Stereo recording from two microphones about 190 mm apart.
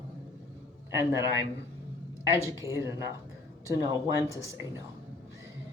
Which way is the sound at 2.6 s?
15° right (ahead or behind).